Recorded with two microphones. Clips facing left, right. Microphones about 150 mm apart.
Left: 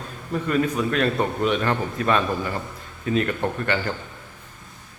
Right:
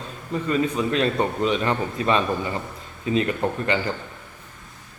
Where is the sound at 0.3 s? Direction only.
5° left (ahead or behind).